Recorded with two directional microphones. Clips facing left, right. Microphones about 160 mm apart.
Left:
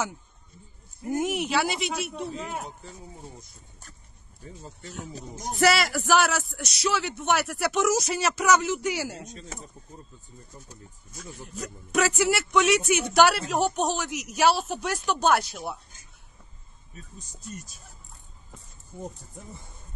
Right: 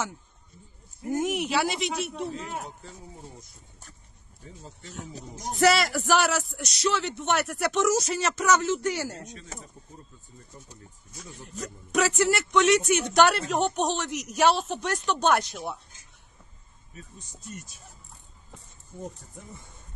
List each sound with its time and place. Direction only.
1.2 s a man's voice: centre (ahead or behind)
2.8 s speech: 15° left (ahead or behind)
5.5 s speech: 5° left (ahead or behind)
11.3 s a man's voice: 5° left (ahead or behind)
17.2 s speech: 40° left (ahead or behind)